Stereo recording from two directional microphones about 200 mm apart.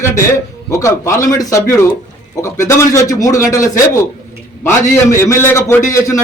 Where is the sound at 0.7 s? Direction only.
15° left (ahead or behind).